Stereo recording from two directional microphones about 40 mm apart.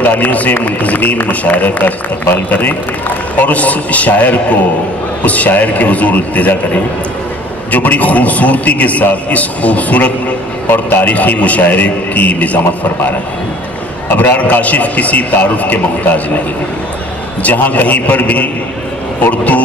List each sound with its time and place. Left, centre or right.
0.0 s speech: left
3.3 s a man's voice: left
10.7 s a man's voice: left
11.1 s a man's voice: left
14.1 s a man's voice: left
17.4 s a man's voice: left